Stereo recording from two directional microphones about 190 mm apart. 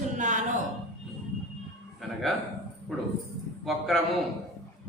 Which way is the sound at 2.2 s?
Centre (ahead or behind).